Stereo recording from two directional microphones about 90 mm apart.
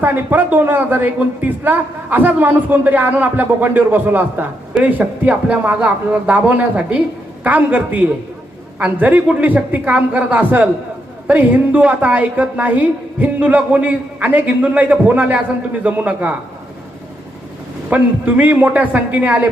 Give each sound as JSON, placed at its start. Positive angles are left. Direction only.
{"t": 0.0, "sound": "a man's voice", "side_deg": -20}
{"t": 17.8, "sound": "a woman's voice", "side_deg": -15}